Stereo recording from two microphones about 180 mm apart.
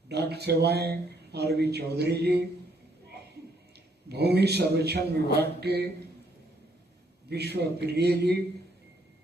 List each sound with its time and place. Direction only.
0.1 s speech: 65° right (ahead or behind)
4.1 s speech: 65° right (ahead or behind)
7.3 s speech: 65° right (ahead or behind)